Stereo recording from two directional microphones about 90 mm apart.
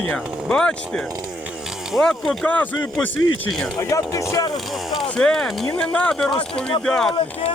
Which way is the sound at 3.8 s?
35° left (ahead or behind).